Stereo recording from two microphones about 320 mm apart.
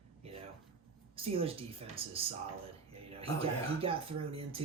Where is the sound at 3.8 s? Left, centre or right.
Centre.